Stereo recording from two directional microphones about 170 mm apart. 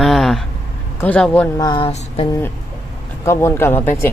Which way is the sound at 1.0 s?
10° left (ahead or behind).